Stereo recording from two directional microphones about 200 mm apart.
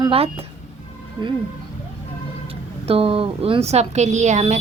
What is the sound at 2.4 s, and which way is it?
Speech, 30° right (ahead or behind).